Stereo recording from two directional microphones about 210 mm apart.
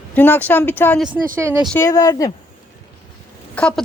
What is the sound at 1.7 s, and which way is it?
Speech, 15° left (ahead or behind).